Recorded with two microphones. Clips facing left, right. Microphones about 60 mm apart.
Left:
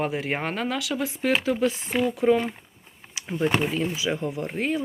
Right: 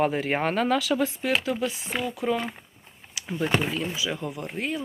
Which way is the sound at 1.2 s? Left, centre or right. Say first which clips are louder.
Left 3 dB; left.